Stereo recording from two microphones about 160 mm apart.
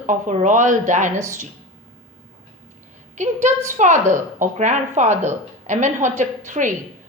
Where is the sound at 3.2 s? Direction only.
50° right (ahead or behind).